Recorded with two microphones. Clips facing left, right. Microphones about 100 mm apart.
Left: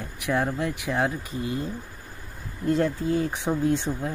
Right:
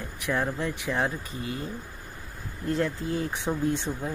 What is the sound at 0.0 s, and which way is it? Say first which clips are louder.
Speech: left 3 dB; 15° left (ahead or behind).